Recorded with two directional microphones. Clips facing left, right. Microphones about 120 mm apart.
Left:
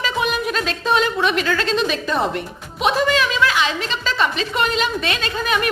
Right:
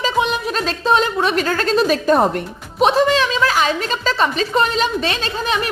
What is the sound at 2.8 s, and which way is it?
A woman's voice, 30° right (ahead or behind).